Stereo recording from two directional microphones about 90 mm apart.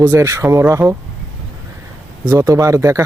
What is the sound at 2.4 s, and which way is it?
Speech, 35° right (ahead or behind).